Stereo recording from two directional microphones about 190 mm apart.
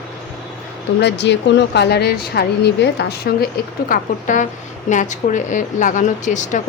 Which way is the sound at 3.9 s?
40° left (ahead or behind).